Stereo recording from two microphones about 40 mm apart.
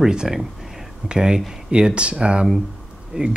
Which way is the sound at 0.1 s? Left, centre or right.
Centre.